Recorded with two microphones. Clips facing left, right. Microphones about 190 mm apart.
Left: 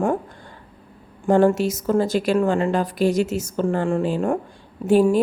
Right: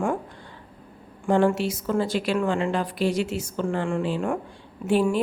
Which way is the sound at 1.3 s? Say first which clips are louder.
Left 4 dB; 40° left (ahead or behind).